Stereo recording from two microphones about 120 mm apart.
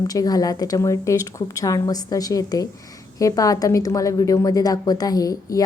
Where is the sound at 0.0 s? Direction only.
30° left (ahead or behind).